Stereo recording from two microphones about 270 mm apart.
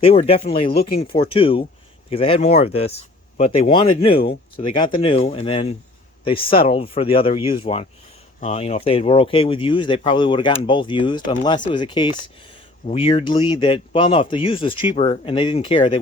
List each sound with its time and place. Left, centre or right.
0.0 s speech: left